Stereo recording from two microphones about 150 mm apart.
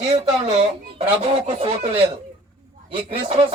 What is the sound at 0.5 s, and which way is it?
A man's voice, 45° right (ahead or behind).